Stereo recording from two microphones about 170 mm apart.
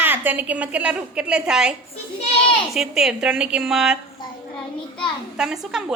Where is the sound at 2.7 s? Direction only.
Centre (ahead or behind).